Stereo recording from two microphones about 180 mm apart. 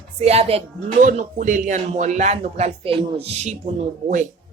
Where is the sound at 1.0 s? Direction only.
45° right (ahead or behind).